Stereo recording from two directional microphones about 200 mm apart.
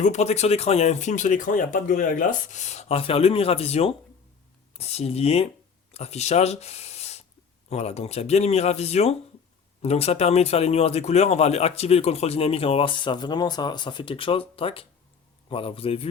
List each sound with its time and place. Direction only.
0.0 s a man's voice: 35° left (ahead or behind)